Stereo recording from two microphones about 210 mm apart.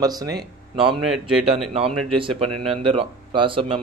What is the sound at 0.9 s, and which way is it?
Speech, centre (ahead or behind).